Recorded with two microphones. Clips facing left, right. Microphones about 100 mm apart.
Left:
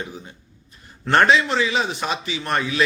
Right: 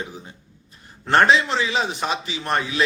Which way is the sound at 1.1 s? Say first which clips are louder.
Even; 30° right (ahead or behind).